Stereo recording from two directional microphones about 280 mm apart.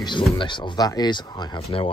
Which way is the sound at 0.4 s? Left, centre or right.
Centre.